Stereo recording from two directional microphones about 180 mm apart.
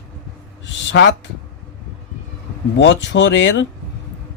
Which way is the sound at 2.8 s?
85° left.